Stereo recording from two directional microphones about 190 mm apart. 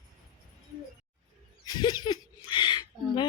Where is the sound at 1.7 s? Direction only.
20° left (ahead or behind).